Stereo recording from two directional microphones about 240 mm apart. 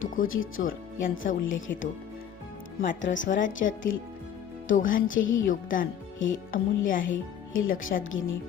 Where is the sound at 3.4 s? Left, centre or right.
Left.